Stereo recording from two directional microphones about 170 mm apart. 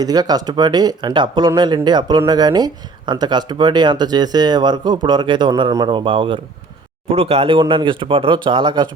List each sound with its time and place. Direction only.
0.0 s speech: 25° right (ahead or behind)